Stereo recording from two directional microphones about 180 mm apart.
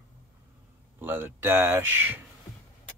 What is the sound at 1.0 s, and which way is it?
Speech, 10° right (ahead or behind).